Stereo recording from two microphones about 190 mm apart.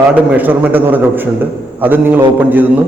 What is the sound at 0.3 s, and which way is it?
A man's voice, 10° right (ahead or behind).